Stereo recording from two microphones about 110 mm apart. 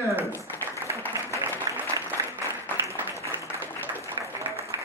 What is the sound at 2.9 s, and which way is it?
Applause, 25° left (ahead or behind).